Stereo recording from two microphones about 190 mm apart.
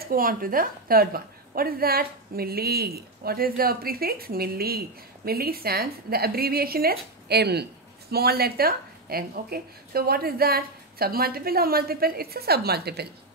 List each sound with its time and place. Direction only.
0.0 s a woman's voice: 50° right (ahead or behind)